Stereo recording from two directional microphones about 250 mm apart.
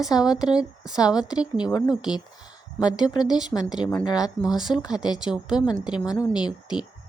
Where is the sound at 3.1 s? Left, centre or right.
Centre.